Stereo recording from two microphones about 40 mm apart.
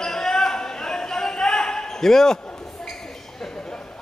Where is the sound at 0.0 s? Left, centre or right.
Centre.